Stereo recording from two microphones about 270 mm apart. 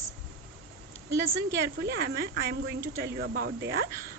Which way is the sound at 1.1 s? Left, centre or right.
Right.